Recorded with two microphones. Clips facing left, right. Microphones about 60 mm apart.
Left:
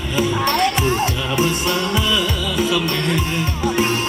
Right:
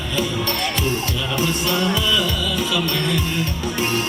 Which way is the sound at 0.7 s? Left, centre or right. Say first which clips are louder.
Left 4 dB; left.